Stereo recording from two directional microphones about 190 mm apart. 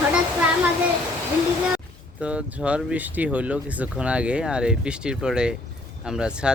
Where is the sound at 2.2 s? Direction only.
5° right (ahead or behind).